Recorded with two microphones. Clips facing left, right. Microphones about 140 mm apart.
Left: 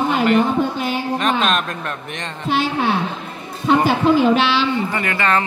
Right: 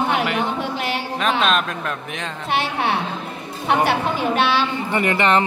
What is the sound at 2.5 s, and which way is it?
Speech, 65° right (ahead or behind).